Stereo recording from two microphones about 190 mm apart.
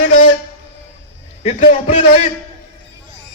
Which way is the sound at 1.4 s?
40° left (ahead or behind).